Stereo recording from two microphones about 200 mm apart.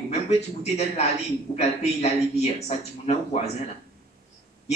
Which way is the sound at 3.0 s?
35° left (ahead or behind).